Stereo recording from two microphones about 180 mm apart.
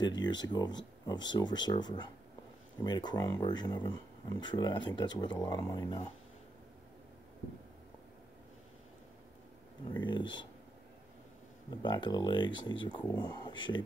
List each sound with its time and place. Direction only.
0.2 s speech: 25° left (ahead or behind)
9.9 s speech: 25° left (ahead or behind)
11.7 s speech: 25° left (ahead or behind)